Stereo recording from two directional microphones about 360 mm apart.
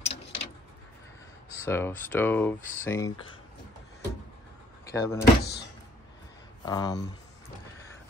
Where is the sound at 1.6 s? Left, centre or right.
Centre.